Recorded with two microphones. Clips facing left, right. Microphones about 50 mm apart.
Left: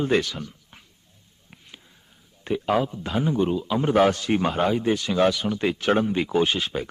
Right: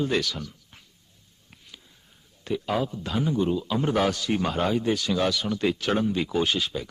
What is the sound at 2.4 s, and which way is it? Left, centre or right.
Speech, left.